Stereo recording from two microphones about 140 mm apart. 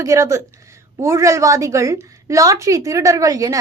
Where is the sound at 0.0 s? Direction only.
20° right (ahead or behind).